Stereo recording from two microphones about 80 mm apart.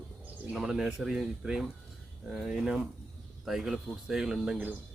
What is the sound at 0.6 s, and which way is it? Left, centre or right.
Speech, centre.